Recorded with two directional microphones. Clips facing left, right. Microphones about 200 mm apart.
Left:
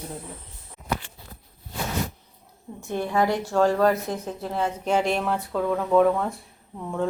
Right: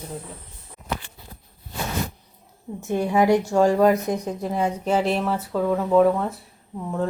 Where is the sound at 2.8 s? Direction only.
15° right (ahead or behind).